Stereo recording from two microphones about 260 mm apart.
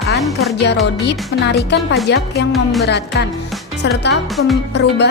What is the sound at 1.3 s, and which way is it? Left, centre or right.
A woman's voice, left.